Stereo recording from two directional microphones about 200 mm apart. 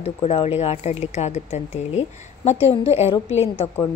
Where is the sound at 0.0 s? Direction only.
30° left (ahead or behind).